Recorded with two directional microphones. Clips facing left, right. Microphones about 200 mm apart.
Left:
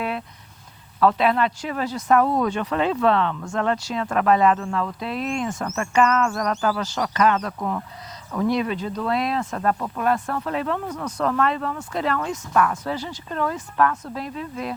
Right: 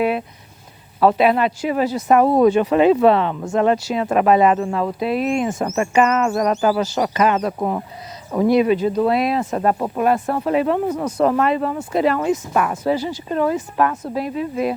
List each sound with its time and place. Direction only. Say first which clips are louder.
0.9 s speech: right 4 dB; 10° right (ahead or behind)
5.6 s speech: right 6 dB; 20° right (ahead or behind)
5.9 s speech: right 2 dB; 5° right (ahead or behind)
7.6 s speech: right 5 dB; 25° right (ahead or behind)
8.4 s speech: right 8 dB; 10° right (ahead or behind)
9.7 s speech: right 6 dB; 30° right (ahead or behind)
10.0 s speech: right 6 dB; 15° right (ahead or behind)
10.8 s speech: right 8 dB; 25° right (ahead or behind)
11.2 s speech: right 5 dB; 15° right (ahead or behind)